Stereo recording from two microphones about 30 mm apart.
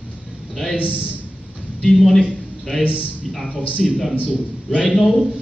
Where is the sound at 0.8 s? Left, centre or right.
Right.